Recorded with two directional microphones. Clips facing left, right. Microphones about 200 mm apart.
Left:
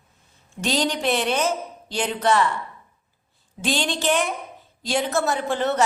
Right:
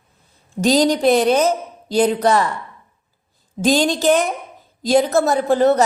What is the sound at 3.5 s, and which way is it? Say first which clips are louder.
A woman's voice: right 9 dB; 40° right (ahead or behind).